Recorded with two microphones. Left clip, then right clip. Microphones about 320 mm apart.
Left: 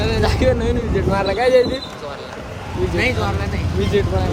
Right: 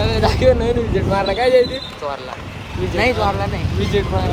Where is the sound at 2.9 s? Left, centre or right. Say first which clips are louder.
Right 5 dB; centre.